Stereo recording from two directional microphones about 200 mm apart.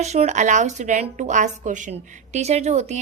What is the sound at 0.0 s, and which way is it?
A woman's voice, 35° right (ahead or behind).